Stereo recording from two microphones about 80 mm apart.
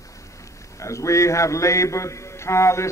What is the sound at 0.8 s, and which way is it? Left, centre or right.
A man's voice, left.